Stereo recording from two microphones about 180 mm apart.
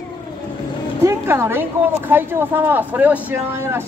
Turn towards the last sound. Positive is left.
turn(degrees=-15)  # may be behind; listen again after turning